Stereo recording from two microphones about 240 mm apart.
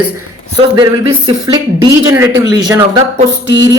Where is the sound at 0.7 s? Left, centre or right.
Centre.